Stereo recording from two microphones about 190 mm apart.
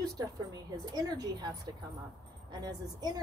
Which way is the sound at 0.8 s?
20° right (ahead or behind).